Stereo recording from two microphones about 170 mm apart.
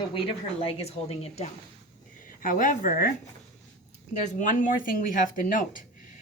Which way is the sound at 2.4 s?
50° left (ahead or behind).